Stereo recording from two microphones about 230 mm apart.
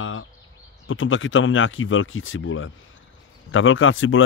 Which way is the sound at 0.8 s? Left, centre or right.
Left.